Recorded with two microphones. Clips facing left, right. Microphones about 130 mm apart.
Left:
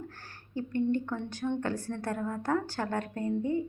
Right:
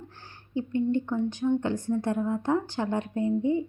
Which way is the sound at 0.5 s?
15° right (ahead or behind).